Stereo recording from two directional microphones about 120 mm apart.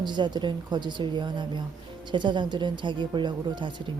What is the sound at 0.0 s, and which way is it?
A woman's voice, 40° right (ahead or behind).